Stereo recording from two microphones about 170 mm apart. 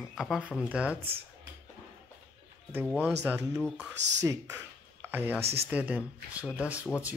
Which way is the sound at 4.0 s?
90° right.